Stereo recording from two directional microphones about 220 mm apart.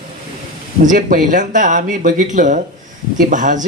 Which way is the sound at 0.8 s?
35° right (ahead or behind).